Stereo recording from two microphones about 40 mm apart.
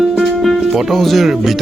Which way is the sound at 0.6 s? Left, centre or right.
Centre.